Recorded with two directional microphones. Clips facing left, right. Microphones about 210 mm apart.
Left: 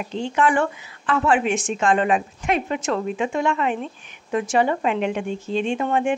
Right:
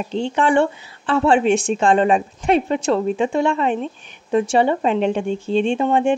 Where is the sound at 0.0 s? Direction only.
30° right (ahead or behind).